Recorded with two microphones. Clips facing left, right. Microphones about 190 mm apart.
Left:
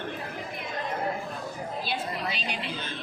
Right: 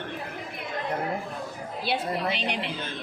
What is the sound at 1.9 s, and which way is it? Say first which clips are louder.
Speech: right 8 dB; 65° right (ahead or behind).